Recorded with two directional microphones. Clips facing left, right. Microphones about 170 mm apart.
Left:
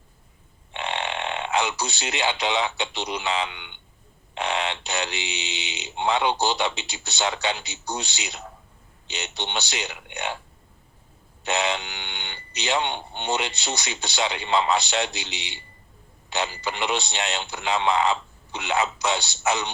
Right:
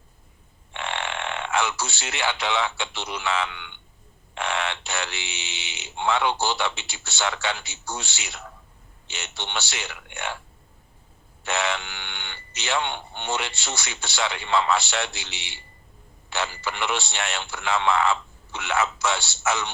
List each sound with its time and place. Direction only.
0.7 s speech: 20° left (ahead or behind)
11.4 s speech: 20° left (ahead or behind)